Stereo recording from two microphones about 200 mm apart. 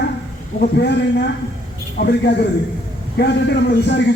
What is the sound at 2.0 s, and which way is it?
A man's voice, 55° left (ahead or behind).